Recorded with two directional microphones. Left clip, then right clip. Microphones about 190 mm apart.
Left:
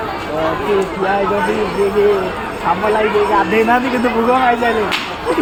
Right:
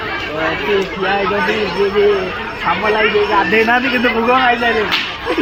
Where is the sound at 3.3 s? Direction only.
10° right (ahead or behind).